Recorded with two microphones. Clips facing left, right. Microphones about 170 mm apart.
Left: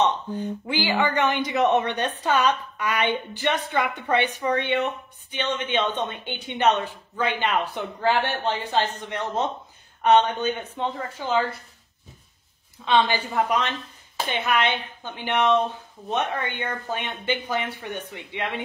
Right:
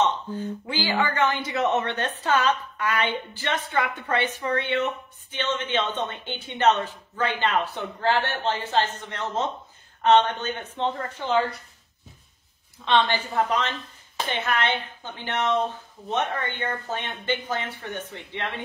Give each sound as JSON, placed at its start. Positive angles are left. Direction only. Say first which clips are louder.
{"t": 0.7, "sound": "a woman's voice", "louder": "left 2 dB", "side_deg": 15}
{"t": 12.7, "sound": "a woman's voice", "louder": "left 1 dB", "side_deg": 10}